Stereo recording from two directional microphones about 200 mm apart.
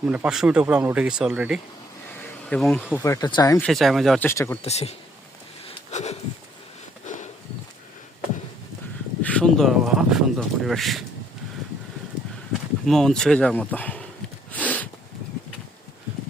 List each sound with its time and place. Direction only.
0.0 s speech: 5° right (ahead or behind); by 3.6 s 20° left (ahead or behind)
3.6 s speech: centre (ahead or behind)
4.3 s speech: 15° left (ahead or behind)
4.6 s speech: 30° left (ahead or behind)
5.6 s sniff: 35° left (ahead or behind)
7.0 s a sound: 35° left (ahead or behind)
9.2 s speech: 5° left (ahead or behind)
12.8 s speech: centre (ahead or behind)
14.5 s a sound: 10° left (ahead or behind)